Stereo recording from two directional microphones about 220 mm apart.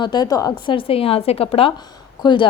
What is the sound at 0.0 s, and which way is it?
A woman's voice, 20° left (ahead or behind).